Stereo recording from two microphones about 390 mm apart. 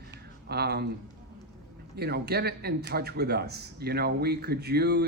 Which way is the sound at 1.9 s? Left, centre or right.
Right.